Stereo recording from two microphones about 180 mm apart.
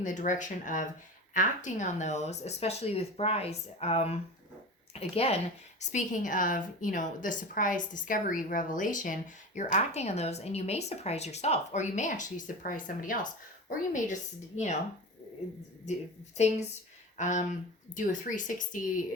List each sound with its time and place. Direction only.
0.0 s a woman's voice: 45° left (ahead or behind)
15.9 s a woman's voice: 40° left (ahead or behind)